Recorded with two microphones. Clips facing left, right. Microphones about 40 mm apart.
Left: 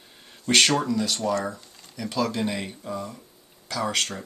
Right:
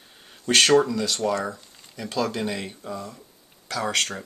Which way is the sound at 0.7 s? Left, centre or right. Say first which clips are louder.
Right 5 dB; right.